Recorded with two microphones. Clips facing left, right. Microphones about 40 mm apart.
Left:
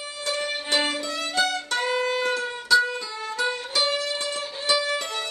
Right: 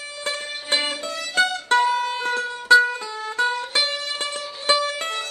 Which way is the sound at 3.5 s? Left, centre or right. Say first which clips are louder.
Right 1 dB; right.